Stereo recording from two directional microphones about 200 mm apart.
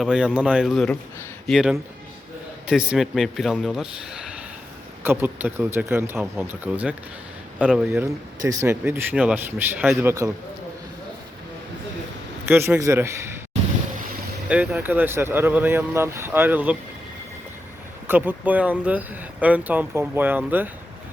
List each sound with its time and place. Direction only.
0.0 s a man's voice: 5° right (ahead or behind)
8.0 s speech: 15° right (ahead or behind)
12.5 s speech: 10° right (ahead or behind)
14.5 s speech: 5° right (ahead or behind)
18.1 s speech: 10° right (ahead or behind)